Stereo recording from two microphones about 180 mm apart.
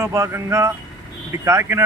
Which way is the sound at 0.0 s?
15° right (ahead or behind).